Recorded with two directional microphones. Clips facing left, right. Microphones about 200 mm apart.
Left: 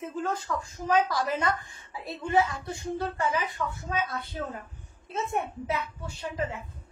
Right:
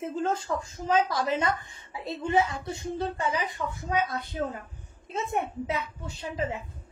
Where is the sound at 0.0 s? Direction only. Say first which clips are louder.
Right 3 dB; 25° right (ahead or behind).